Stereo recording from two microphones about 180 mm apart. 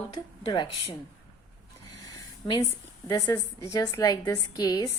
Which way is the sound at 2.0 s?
20° left (ahead or behind).